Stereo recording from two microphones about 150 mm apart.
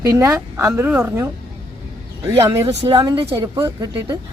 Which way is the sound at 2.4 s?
20° right (ahead or behind).